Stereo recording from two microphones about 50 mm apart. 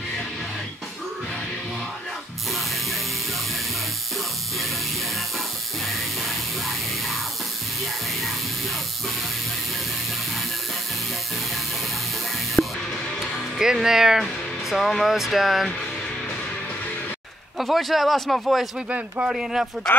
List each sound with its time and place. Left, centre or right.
12.6 s music: left
13.2 s music: centre
14.2 s speech: centre
17.6 s a man's voice: centre
18.9 s speech: right
19.3 s speech: centre